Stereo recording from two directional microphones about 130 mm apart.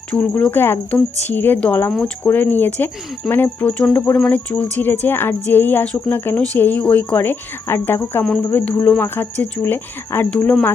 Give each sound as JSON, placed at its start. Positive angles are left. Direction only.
{"t": 0.1, "sound": "speech", "side_deg": 10}